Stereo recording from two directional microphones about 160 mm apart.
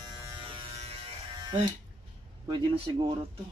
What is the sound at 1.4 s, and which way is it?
Speech, 25° right (ahead or behind).